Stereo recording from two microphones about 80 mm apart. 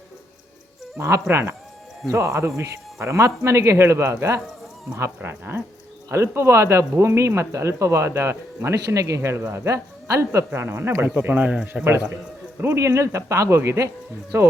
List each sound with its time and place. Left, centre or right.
0.9 s speech: right; by 11.9 s centre
12.6 s speech: right